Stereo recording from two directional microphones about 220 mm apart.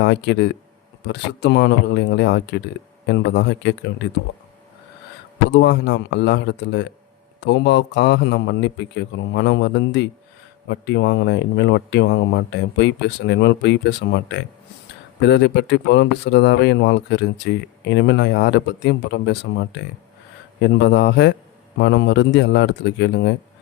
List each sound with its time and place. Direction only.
0.0 s speech: 50° left (ahead or behind)
5.5 s speech: 50° left (ahead or behind)